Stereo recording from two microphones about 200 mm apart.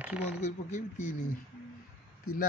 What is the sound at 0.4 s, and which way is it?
Speech, 35° left (ahead or behind).